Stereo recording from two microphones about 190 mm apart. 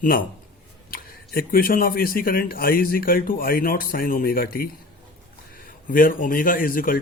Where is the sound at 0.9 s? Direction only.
50° left (ahead or behind).